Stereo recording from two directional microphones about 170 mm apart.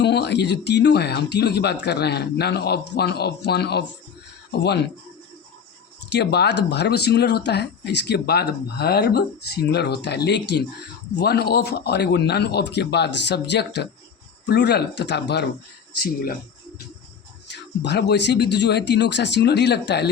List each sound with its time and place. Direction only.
0.0 s speech: 80° left
6.1 s speech: 80° left
16.0 s speech: 60° left (ahead or behind)
17.5 s speech: 90° left